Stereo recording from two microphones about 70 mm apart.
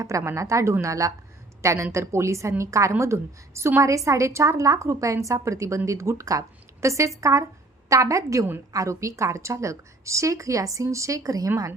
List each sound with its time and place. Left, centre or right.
0.0 s a woman's voice: right